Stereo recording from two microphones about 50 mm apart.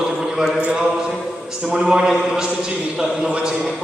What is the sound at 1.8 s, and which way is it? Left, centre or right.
Speech, centre.